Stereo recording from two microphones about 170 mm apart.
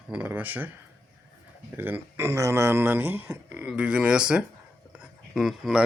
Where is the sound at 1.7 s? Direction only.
10° right (ahead or behind).